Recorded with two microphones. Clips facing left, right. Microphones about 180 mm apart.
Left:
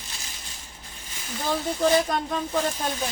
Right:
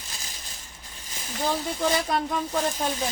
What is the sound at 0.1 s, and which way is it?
Crushing, 35° right (ahead or behind).